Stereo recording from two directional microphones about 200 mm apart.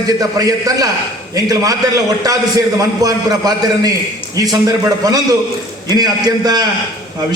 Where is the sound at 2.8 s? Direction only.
20° right (ahead or behind).